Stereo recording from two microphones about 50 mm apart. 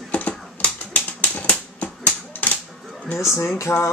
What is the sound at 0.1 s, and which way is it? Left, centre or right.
Typewriter, left.